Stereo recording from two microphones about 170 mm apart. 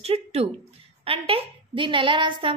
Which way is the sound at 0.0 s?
35° right (ahead or behind).